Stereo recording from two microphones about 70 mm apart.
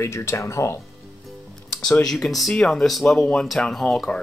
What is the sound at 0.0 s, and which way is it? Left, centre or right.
Speech, left.